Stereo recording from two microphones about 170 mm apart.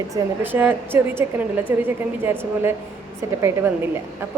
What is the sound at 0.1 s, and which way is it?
A woman's voice, 10° right (ahead or behind).